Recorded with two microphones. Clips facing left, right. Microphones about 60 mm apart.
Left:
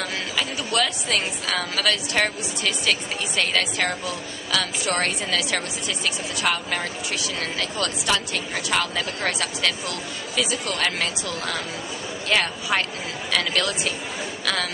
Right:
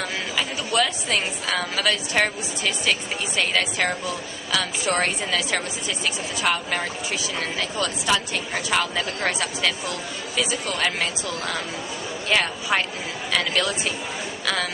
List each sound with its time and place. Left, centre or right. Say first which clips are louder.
0.4 s a woman's voice: right 1 dB; centre